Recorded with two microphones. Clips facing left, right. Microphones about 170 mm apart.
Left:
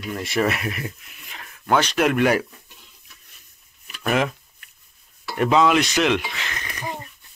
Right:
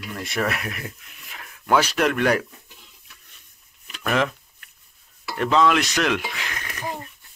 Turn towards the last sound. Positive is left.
turn(degrees=0)  # may be behind; listen again after turning